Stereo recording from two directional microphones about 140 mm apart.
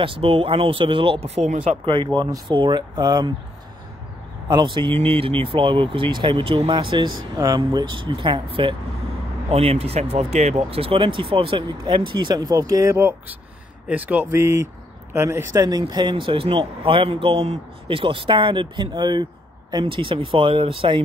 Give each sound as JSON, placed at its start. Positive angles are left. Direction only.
{"t": 0.0, "sound": "speech", "side_deg": -40}
{"t": 2.5, "sound": "speech", "side_deg": -35}
{"t": 4.5, "sound": "speech", "side_deg": -35}